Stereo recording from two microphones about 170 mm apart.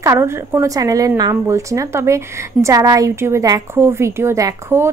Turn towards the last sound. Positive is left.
turn(degrees=-15)  # may be behind; listen again after turning